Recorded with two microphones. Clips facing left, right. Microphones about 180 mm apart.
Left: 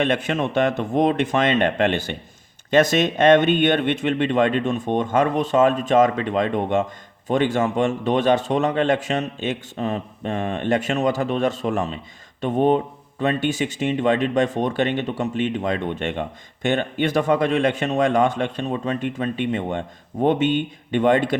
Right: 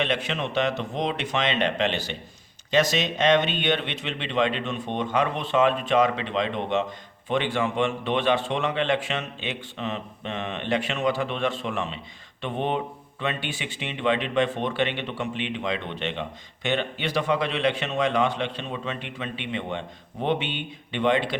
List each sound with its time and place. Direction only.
0.0 s a man's voice: 50° left (ahead or behind)